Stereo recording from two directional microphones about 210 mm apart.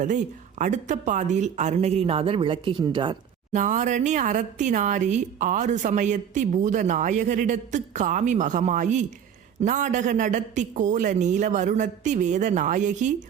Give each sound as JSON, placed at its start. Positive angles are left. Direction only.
{"t": 0.6, "sound": "speech", "side_deg": -35}
{"t": 3.6, "sound": "speech", "side_deg": -35}